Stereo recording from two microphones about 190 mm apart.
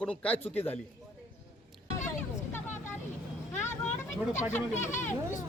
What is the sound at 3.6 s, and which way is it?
Vehicle, 10° left (ahead or behind).